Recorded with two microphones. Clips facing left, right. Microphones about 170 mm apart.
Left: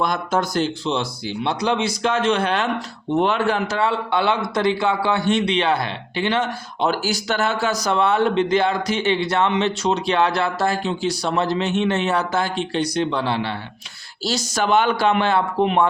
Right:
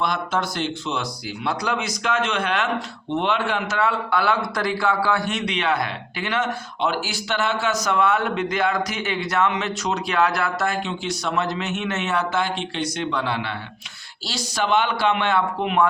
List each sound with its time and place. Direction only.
0.0 s a man's voice: 40° left (ahead or behind)
14.3 s speech: 45° left (ahead or behind)